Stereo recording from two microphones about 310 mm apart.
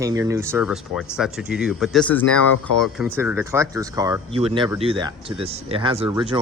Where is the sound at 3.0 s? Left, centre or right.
Centre.